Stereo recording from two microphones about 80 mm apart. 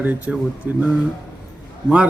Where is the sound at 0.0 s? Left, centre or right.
Right.